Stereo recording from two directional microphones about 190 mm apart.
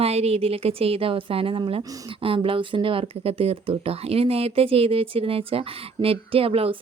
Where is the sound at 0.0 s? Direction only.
35° right (ahead or behind).